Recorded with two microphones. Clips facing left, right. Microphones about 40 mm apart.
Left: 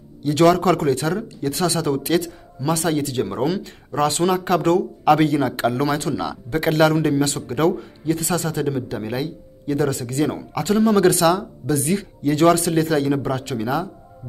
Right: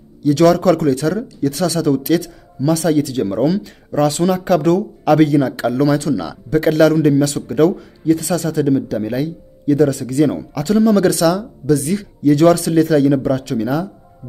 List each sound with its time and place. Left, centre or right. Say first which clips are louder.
0.2 s speech: right 3 dB; left
9.2 s speech: right 6 dB; left
10.1 s speech: right 7 dB; centre
10.5 s speech: left 1 dB; left